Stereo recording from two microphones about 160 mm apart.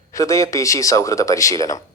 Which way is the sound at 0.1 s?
20° left (ahead or behind).